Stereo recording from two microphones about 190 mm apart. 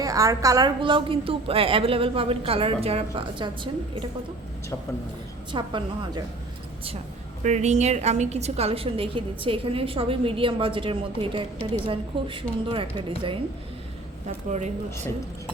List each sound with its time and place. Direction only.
0.0 s a woman's voice: 20° right (ahead or behind)
5.5 s a woman's voice: 25° right (ahead or behind)
7.4 s a woman's voice: 40° right (ahead or behind)